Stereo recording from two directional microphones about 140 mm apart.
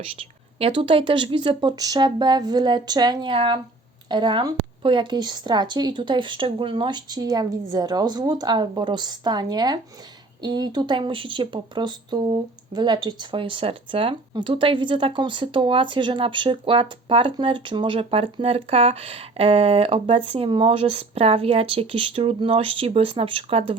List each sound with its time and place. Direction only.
0.6 s speech: 40° right (ahead or behind)